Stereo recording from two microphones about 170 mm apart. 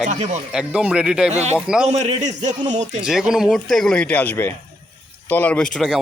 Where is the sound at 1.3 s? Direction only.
40° right (ahead or behind).